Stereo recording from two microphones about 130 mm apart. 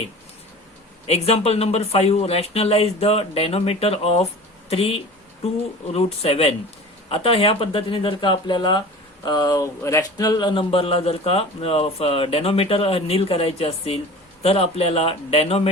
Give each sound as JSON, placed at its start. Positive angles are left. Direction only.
{"t": 1.0, "sound": "speech", "side_deg": 55}
{"t": 4.7, "sound": "a sound", "side_deg": 50}
{"t": 5.9, "sound": "speech", "side_deg": 50}